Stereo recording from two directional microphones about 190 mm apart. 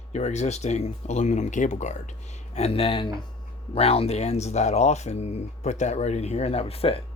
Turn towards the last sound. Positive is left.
turn(degrees=30)  # may be behind; listen again after turning